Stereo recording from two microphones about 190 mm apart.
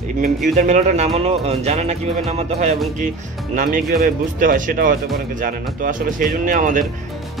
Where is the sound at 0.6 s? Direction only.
40° right (ahead or behind).